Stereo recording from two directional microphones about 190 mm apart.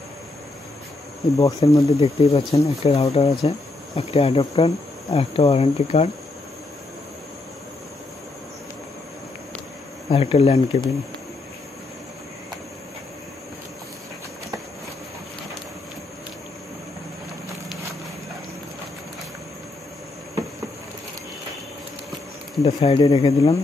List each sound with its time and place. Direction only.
1.6 s speech: 30° left (ahead or behind)
10.0 s speech: 30° left (ahead or behind)
22.6 s speech: 35° left (ahead or behind)